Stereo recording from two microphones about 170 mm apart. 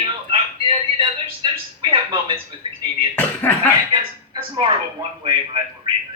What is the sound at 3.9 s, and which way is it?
Speech, 30° right (ahead or behind).